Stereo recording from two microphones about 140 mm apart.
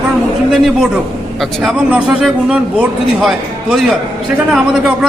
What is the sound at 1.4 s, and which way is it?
Speech, 5° right (ahead or behind).